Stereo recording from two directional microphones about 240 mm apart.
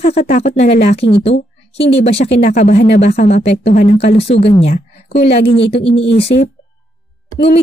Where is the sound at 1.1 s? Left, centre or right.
Left.